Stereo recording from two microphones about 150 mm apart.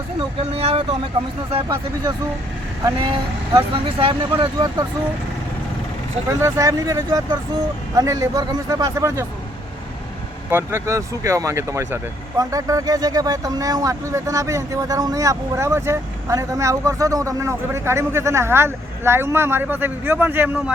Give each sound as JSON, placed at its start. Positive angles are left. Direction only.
{"t": 0.5, "sound": "speech", "side_deg": -40}
{"t": 6.4, "sound": "speech", "side_deg": -20}
{"t": 10.5, "sound": "speech", "side_deg": -15}